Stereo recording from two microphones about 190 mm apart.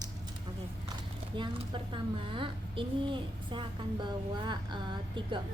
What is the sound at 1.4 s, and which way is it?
A woman's voice, 25° right (ahead or behind).